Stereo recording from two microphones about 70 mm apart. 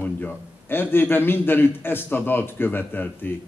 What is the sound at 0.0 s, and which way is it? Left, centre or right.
A man's voice, left.